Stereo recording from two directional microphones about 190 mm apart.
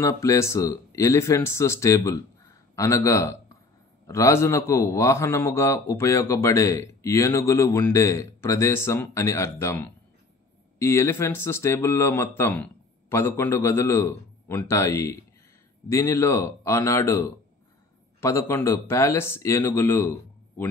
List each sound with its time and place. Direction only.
0.0 s a man's voice: 15° left (ahead or behind)
18.2 s a man's voice: 15° left (ahead or behind)